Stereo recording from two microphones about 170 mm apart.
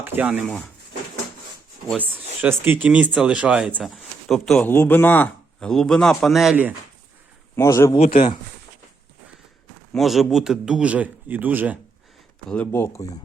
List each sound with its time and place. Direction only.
0.0 s speech: 10° right (ahead or behind)
0.4 s speech: 5° left (ahead or behind)
2.0 s speech: 10° right (ahead or behind)
7.5 s speech: 15° left (ahead or behind)
7.9 s speech: 45° left (ahead or behind)
9.9 s speech: centre (ahead or behind)
12.5 s speech: 10° left (ahead or behind)